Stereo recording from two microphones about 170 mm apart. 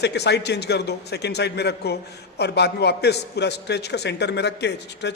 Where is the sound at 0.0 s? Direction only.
80° left.